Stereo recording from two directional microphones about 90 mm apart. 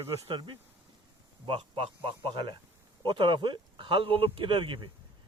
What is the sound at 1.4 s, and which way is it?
Speech, 85° right.